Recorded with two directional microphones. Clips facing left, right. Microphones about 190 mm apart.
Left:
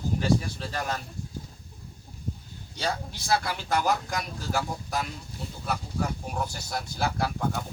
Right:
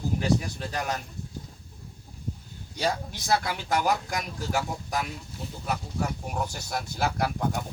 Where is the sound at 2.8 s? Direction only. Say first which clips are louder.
Right 3 dB; 15° right (ahead or behind).